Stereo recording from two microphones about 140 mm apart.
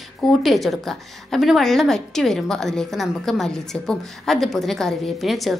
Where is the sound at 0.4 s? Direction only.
Centre (ahead or behind).